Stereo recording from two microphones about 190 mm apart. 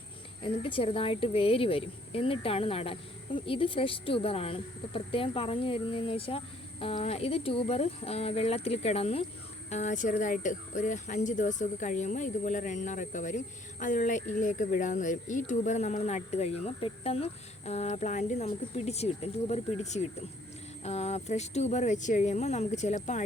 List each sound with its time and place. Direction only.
0.4 s a woman's voice: 25° left (ahead or behind)